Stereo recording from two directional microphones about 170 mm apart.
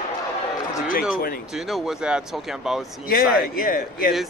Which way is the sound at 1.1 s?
60° left (ahead or behind).